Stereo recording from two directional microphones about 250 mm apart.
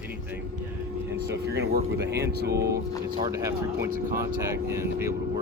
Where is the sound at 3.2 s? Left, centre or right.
Centre.